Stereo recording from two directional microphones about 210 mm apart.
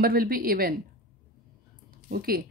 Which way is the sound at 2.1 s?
45° right (ahead or behind).